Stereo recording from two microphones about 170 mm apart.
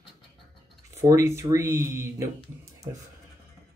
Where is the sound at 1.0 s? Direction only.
20° right (ahead or behind).